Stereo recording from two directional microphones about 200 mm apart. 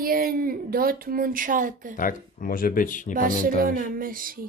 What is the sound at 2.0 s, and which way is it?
Speech, 45° left (ahead or behind).